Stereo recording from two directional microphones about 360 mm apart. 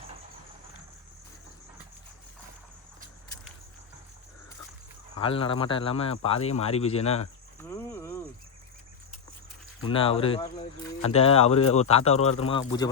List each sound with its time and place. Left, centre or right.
5.1 s speech: centre
9.8 s speech: centre